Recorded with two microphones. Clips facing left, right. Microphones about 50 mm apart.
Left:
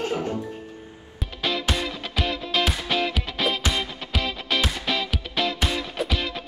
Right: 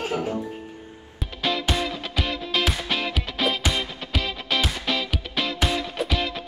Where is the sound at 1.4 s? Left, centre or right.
Centre.